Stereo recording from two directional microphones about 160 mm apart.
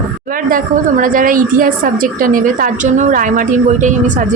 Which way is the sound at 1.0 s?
55° right (ahead or behind).